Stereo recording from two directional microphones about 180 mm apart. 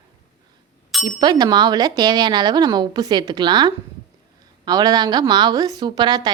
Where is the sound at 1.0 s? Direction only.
20° right (ahead or behind).